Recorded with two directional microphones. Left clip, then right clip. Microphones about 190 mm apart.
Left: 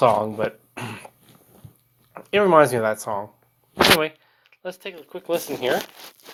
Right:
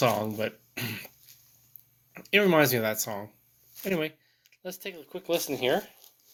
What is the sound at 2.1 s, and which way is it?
Speech, 40° right (ahead or behind).